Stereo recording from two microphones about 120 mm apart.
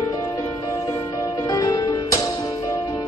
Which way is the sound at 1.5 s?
30° left (ahead or behind).